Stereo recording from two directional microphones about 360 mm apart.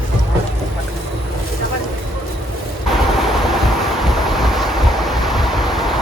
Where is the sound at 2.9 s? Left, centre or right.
Centre.